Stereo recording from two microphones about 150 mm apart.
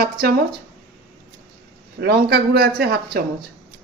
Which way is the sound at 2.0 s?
90° right.